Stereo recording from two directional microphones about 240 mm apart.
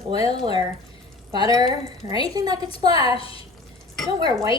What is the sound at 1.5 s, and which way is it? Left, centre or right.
A woman's voice, centre.